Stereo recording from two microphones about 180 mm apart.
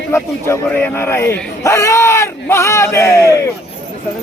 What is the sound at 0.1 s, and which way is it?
Speech, 15° left (ahead or behind).